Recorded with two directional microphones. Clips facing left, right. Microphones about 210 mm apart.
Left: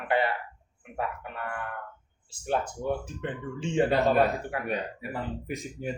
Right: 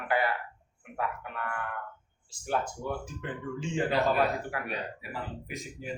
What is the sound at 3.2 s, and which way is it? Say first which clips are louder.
Speech: left 2 dB; 25° left (ahead or behind).